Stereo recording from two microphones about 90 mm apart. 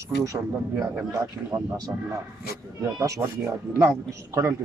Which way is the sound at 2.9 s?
40° right (ahead or behind).